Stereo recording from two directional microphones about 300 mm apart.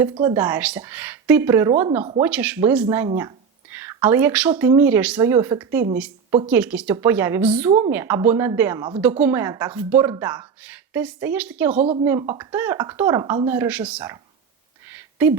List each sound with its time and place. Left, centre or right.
0.0 s a woman's voice: centre
11.8 s a woman's voice: right
12.0 s a woman's voice: centre
14.9 s a sound: centre